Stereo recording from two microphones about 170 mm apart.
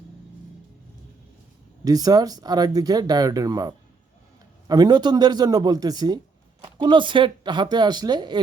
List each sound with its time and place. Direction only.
1.8 s speech: 20° right (ahead or behind)